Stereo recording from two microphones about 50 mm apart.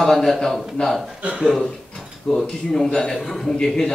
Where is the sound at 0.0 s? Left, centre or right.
Centre.